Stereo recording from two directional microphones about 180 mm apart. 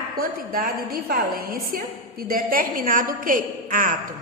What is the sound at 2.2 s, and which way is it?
A woman's voice, 50° right (ahead or behind).